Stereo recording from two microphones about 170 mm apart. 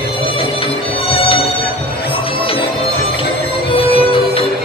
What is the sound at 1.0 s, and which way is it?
Music, 35° left (ahead or behind).